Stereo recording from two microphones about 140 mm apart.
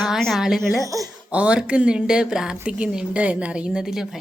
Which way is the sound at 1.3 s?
10° right (ahead or behind).